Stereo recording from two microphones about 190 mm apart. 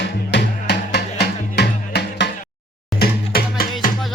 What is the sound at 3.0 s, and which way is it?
Music, 50° left (ahead or behind).